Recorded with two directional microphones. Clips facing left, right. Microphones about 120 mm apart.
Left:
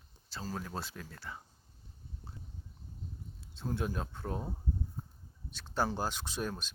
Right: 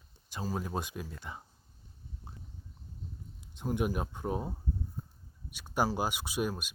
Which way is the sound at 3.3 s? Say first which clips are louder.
Right 4 dB; 15° right (ahead or behind).